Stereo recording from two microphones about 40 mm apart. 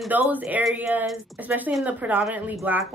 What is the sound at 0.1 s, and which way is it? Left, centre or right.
A woman's voice, right.